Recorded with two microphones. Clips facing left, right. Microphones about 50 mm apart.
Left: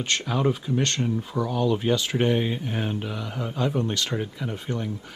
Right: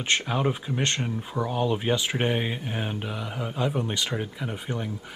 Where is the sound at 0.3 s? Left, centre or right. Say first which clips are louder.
Left 2 dB; centre.